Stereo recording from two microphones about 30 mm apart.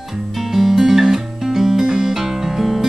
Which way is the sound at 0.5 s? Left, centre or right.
Centre.